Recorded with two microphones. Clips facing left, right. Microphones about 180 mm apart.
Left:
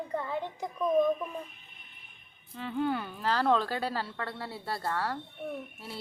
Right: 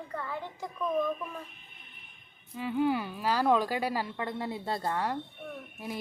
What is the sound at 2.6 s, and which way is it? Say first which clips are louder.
Speech: right 3 dB; 10° right (ahead or behind).